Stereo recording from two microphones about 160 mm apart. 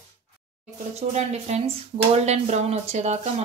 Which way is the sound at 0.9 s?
40° right (ahead or behind).